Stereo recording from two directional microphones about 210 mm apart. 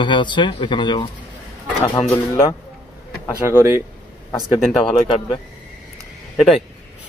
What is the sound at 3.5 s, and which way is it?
Speech, 10° right (ahead or behind).